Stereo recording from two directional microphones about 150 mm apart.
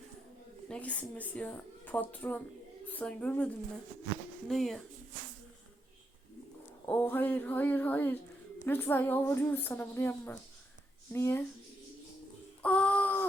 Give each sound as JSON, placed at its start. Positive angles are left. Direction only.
{"t": 0.7, "sound": "a woman's voice", "side_deg": 10}
{"t": 6.8, "sound": "a woman's voice", "side_deg": 10}
{"t": 12.6, "sound": "a sound", "side_deg": 10}